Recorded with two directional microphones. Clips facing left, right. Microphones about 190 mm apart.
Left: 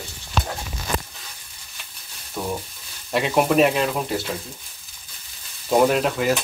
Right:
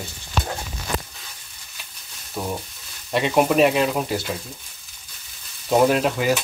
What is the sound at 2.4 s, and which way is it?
Speech, 5° right (ahead or behind).